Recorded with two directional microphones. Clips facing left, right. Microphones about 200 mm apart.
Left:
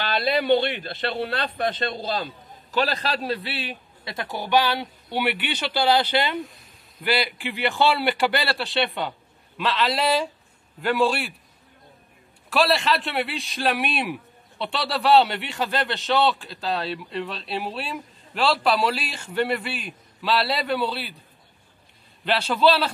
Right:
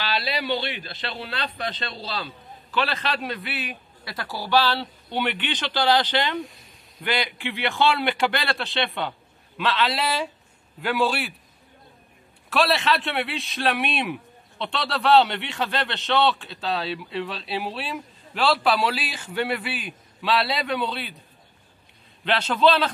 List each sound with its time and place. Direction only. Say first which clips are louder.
0.0 s a man's voice: left 4 dB; 50° left (ahead or behind); by 11.3 s centre (ahead or behind)
12.4 s a man's voice: left 1 dB; centre (ahead or behind)
22.2 s a man's voice: even; 10° left (ahead or behind)